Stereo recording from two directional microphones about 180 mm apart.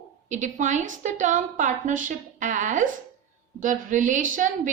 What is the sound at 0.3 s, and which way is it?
A woman's voice, 45° right (ahead or behind).